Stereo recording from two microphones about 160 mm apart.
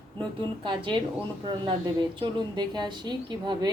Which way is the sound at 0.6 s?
30° right (ahead or behind).